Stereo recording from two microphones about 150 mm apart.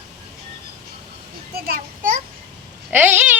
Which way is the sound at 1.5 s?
75° right (ahead or behind).